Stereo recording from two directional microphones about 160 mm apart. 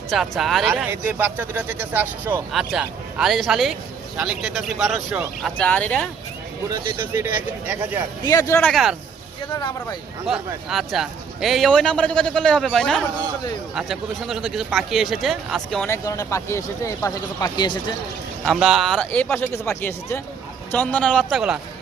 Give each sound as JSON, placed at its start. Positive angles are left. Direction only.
{"t": 0.1, "sound": "a man's voice", "side_deg": 0}
{"t": 6.7, "sound": "speech", "side_deg": -20}
{"t": 8.2, "sound": "speech", "side_deg": 25}
{"t": 8.7, "sound": "a man's voice", "side_deg": 0}
{"t": 9.5, "sound": "speech", "side_deg": 25}
{"t": 10.2, "sound": "a man's voice", "side_deg": 0}
{"t": 15.9, "sound": "speech", "side_deg": 20}
{"t": 18.4, "sound": "a man's voice", "side_deg": 0}
{"t": 19.1, "sound": "a man's voice", "side_deg": 10}